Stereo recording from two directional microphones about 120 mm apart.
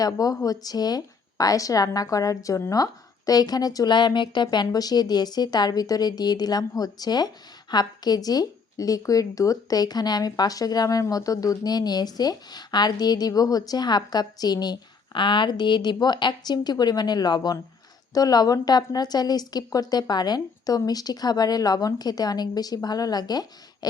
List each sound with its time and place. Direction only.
0.0 s speech: 30° left (ahead or behind)